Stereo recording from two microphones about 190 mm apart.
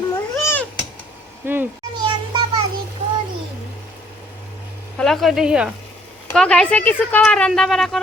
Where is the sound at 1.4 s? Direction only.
10° right (ahead or behind).